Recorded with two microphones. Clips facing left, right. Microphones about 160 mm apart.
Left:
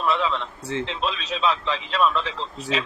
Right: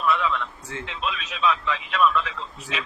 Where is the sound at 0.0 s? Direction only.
30° left (ahead or behind).